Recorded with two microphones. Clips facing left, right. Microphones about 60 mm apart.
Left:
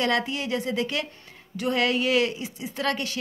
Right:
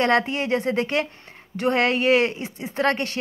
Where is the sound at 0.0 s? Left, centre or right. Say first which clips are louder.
Right 5 dB; right.